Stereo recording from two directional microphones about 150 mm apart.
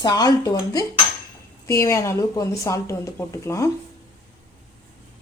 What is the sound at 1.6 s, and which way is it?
Speech, 20° left (ahead or behind).